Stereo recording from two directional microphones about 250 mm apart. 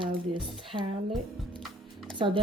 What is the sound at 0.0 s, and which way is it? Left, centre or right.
Speech, centre.